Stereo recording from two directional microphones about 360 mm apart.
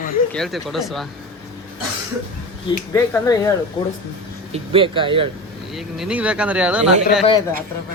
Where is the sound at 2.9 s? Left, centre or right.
Centre.